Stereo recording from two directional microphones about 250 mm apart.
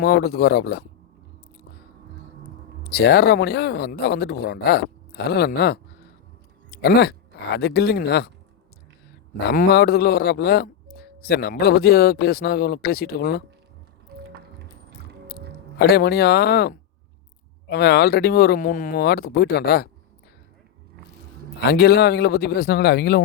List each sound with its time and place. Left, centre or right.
0.0 s speech: left
2.9 s speech: left
9.5 s speech: left
15.8 s speech: left
21.6 s speech: left